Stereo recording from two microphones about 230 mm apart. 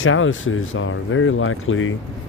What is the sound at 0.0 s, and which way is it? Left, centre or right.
Speech, left.